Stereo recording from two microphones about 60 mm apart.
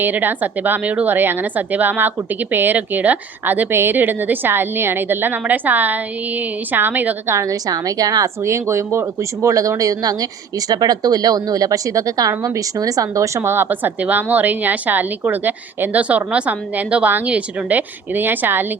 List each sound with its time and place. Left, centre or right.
0.0 s a woman's voice: right
7.3 s speech: right
7.5 s speech: right
8.4 s speech: right
13.5 s a woman's voice: right